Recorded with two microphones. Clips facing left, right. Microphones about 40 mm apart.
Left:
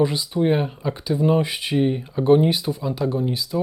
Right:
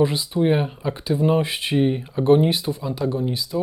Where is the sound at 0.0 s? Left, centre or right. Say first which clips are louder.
Right 1 dB; centre.